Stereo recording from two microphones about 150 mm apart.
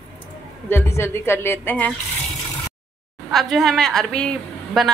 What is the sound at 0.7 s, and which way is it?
A woman's voice, 15° left (ahead or behind).